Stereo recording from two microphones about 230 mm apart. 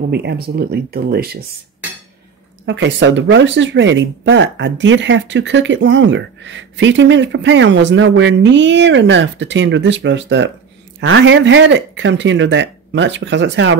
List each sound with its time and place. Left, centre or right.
0.1 s speech: right
2.6 s speech: right